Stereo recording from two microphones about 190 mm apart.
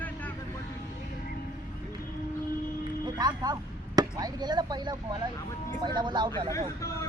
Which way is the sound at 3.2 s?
20° right (ahead or behind).